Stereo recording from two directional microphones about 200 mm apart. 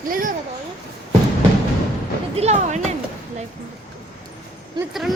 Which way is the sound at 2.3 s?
30° right (ahead or behind).